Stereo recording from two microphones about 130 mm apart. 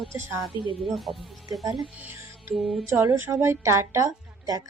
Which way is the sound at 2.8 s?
25° right (ahead or behind).